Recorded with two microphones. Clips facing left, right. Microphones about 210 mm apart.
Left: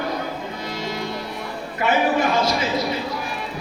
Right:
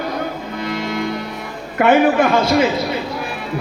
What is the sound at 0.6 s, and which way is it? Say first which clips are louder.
Music: right 8 dB; 55° right (ahead or behind).